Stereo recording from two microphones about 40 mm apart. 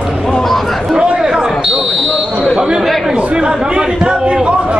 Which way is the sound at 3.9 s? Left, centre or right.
Centre.